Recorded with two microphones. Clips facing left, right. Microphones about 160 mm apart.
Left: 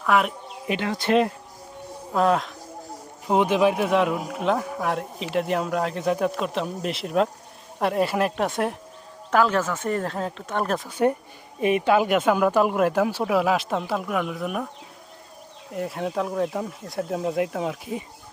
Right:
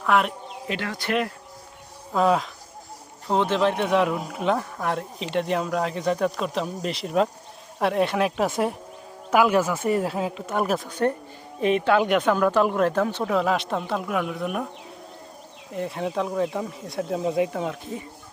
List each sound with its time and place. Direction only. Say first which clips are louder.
0.0 s speech: even; centre (ahead or behind)
0.7 s speech: left 5 dB; 20° left (ahead or behind)
2.1 s speech: even; centre (ahead or behind)
3.2 s speech: left 2 dB; 15° left (ahead or behind); by 10.8 s 5° right (ahead or behind)
10.8 s speech: left 2 dB; 5° left (ahead or behind)
15.7 s speech: even; centre (ahead or behind)